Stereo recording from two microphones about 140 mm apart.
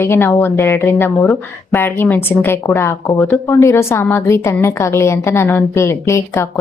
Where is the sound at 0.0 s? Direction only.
15° left (ahead or behind).